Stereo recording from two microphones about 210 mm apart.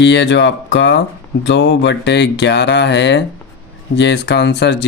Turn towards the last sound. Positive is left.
turn(degrees=55)  # may be behind; listen again after turning